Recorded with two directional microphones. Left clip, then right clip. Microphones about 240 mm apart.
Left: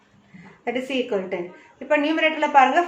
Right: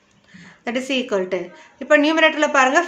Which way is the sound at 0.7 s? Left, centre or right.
Right.